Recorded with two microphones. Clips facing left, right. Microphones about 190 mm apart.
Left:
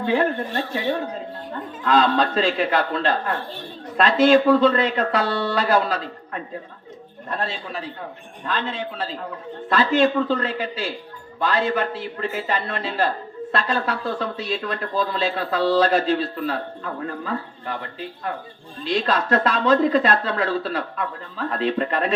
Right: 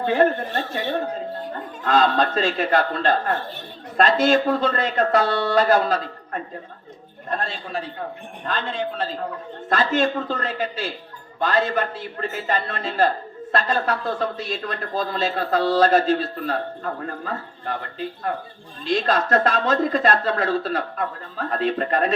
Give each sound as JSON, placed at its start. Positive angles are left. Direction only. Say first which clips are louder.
{"t": 0.0, "sound": "a man's voice", "louder": "right 2 dB", "side_deg": -45}
{"t": 1.8, "sound": "a man's voice", "louder": "even", "side_deg": -45}
{"t": 18.9, "sound": "a man's voice", "louder": "right 1 dB", "side_deg": -45}